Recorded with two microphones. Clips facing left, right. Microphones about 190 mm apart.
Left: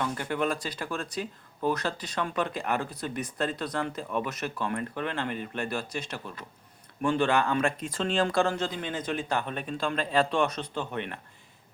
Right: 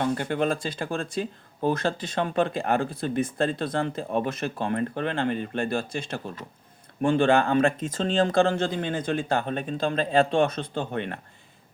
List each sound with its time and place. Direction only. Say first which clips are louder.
0.0 s speech: right 4 dB; 30° right (ahead or behind)
7.9 s speech: right 3 dB; 40° right (ahead or behind)
8.4 s speech: right 5 dB; 30° right (ahead or behind)